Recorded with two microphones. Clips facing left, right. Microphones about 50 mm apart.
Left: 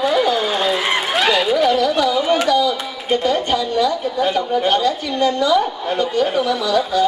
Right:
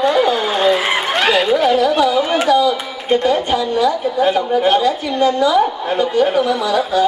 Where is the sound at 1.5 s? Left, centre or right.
Centre.